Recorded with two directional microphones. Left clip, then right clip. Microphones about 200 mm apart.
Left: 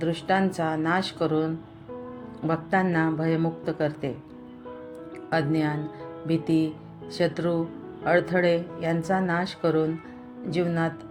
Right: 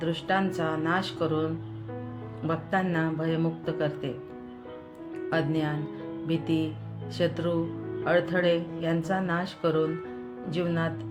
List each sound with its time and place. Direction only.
0.0 s speech: 20° left (ahead or behind)
5.3 s speech: 15° left (ahead or behind)